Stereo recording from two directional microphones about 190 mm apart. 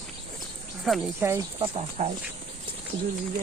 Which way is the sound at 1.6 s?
35° right (ahead or behind).